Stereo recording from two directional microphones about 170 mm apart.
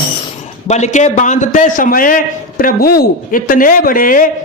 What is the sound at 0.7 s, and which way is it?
A man's voice, 45° left (ahead or behind).